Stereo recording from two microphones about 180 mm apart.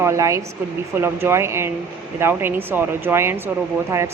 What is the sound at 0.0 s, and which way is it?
A woman's voice, 15° right (ahead or behind).